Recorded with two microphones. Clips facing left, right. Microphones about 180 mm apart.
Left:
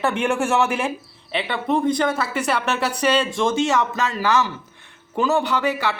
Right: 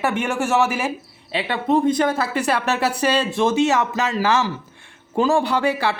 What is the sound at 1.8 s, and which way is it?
Speech, 25° right (ahead or behind).